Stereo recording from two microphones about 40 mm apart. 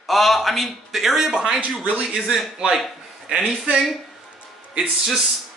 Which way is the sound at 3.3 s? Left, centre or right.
Right.